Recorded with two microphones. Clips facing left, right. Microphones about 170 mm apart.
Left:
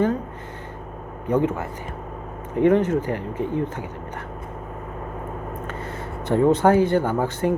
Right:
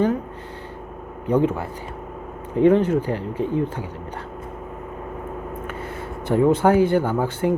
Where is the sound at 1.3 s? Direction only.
15° right (ahead or behind).